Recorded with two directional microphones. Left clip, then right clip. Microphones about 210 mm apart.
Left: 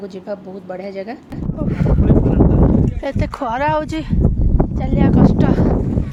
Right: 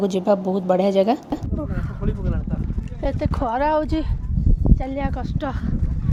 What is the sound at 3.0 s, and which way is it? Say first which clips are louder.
Speech: left 2 dB; 10° left (ahead or behind).